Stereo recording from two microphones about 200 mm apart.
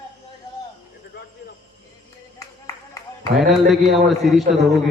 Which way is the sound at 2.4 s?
15° left (ahead or behind).